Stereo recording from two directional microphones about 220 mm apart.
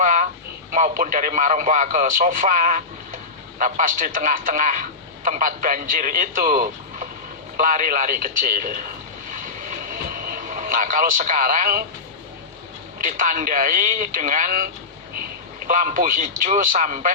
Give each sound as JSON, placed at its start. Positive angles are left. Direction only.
{"t": 0.0, "sound": "a sound", "side_deg": -35}
{"t": 0.7, "sound": "a man's voice", "side_deg": -35}
{"t": 9.3, "sound": "vehicle", "side_deg": -40}
{"t": 13.1, "sound": "a man's voice", "side_deg": -35}